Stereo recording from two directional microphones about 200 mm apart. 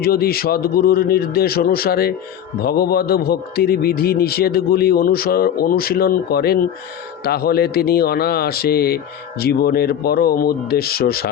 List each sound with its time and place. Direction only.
0.0 s a man's voice: 50° left (ahead or behind)